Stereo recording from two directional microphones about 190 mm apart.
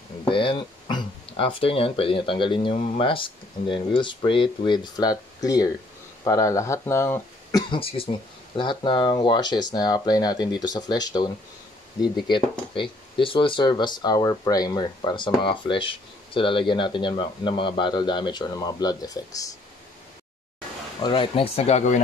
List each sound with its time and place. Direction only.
0.2 s speech: 25° left (ahead or behind)
7.7 s speech: 30° left (ahead or behind)
21.0 s speech: 25° left (ahead or behind)